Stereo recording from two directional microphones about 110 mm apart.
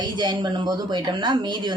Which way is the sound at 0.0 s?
40° right (ahead or behind).